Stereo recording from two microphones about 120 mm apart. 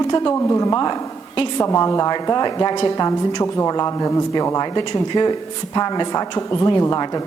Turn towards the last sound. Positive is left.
turn(degrees=30)  # may be behind; listen again after turning